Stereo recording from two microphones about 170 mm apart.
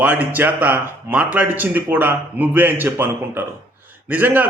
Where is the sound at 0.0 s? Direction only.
10° right (ahead or behind).